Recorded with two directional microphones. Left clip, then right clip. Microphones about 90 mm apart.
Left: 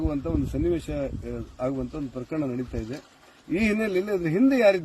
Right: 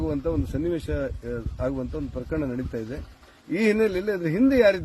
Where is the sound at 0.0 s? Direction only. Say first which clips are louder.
Right 1 dB; 25° right (ahead or behind).